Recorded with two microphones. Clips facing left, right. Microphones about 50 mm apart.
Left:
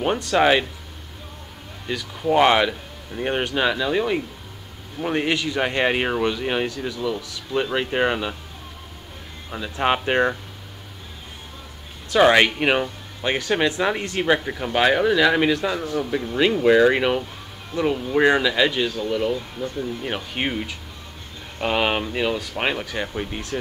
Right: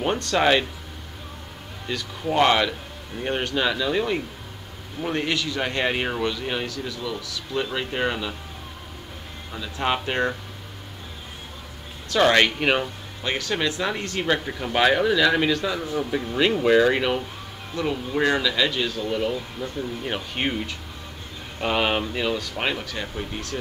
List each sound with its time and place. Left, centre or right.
0.0 s speech: centre
1.9 s speech: centre
5.0 s speech: centre
9.5 s speech: left
12.1 s speech: centre
13.2 s speech: left
16.0 s speech: centre
19.0 s speech: centre; by 23.6 s left